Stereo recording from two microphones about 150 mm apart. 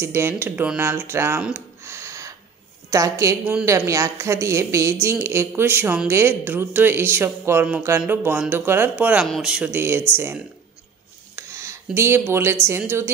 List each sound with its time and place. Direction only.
0.0 s speech: 15° right (ahead or behind)
11.3 s a sound: 20° right (ahead or behind)
12.6 s speech: 15° right (ahead or behind)